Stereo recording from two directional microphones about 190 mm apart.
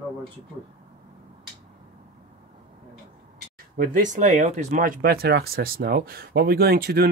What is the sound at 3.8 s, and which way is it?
Speech, 45° right (ahead or behind).